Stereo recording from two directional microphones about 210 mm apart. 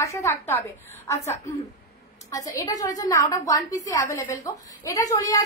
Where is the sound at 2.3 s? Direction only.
15° left (ahead or behind).